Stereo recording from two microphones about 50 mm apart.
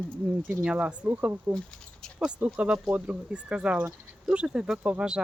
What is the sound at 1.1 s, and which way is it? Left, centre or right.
Speech, right.